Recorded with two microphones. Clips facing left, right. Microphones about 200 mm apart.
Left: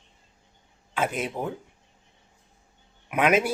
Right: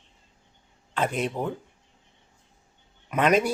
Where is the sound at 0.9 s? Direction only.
5° left (ahead or behind).